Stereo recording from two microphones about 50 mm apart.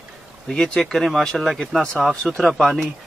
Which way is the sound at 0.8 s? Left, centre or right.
Centre.